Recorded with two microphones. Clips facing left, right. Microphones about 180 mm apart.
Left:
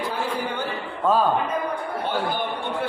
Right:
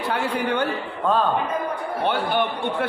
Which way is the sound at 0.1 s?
70° right (ahead or behind).